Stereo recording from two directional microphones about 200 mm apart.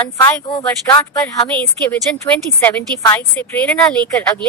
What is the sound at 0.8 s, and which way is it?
Speech, 20° left (ahead or behind).